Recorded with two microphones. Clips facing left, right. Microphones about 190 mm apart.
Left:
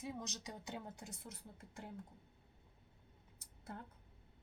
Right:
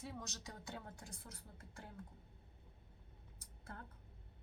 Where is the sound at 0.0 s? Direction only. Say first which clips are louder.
Left 3 dB; 20° left (ahead or behind).